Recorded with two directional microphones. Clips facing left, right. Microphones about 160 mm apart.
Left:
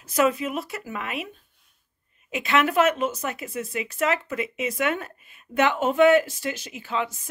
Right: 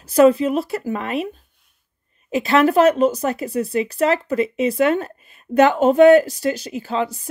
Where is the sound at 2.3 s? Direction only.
35° right (ahead or behind).